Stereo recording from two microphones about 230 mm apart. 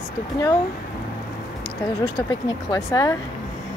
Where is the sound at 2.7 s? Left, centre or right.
Centre.